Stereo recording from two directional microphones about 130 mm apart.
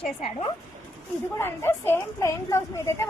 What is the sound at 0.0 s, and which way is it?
Speech, 50° left (ahead or behind).